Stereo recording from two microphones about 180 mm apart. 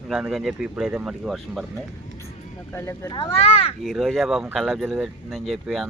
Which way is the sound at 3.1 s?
30° left (ahead or behind).